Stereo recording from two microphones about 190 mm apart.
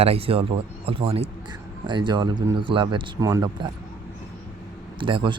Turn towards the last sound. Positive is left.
turn(degrees=-25)  # may be behind; listen again after turning